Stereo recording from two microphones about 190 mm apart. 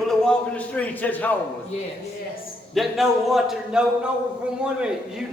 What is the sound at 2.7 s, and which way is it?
A man's voice, centre (ahead or behind).